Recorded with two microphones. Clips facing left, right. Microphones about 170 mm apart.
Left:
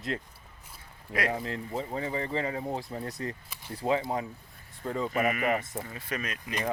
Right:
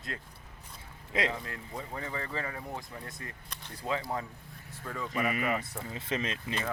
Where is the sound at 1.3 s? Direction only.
25° left (ahead or behind).